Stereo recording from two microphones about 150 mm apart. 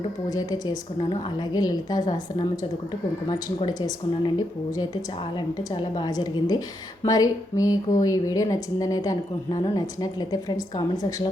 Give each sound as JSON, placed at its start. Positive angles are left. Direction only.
{"t": 0.3, "sound": "speech", "side_deg": 25}
{"t": 3.7, "sound": "speech", "side_deg": 25}